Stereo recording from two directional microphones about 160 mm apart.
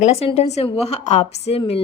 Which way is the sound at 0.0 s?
40° left (ahead or behind).